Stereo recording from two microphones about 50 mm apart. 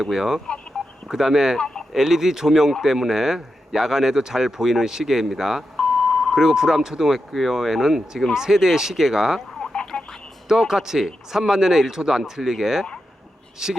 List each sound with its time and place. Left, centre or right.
0.0 s speech: centre
1.5 s a sound: centre
1.9 s speech: centre
5.7 s beep: left
6.3 s speech: centre
9.7 s telephone: centre
10.5 s speech: centre